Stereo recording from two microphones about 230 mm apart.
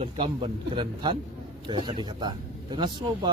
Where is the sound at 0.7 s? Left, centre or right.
Right.